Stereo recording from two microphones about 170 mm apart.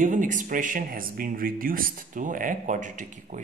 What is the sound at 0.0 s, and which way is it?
Speech, 50° right (ahead or behind).